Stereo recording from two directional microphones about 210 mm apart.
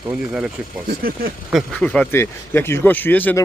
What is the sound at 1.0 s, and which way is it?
Speech, 45° right (ahead or behind).